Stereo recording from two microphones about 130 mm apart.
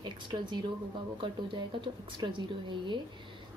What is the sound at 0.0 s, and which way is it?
Speech, 35° right (ahead or behind).